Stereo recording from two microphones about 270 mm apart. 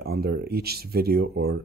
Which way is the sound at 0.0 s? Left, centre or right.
Right.